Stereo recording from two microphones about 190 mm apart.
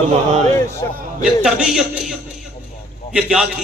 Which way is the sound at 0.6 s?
15° left (ahead or behind).